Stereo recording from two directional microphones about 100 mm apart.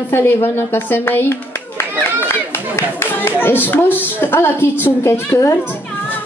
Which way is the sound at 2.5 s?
20° left (ahead or behind).